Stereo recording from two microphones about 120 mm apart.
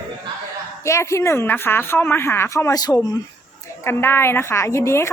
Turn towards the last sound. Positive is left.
turn(degrees=25)  # may be behind; listen again after turning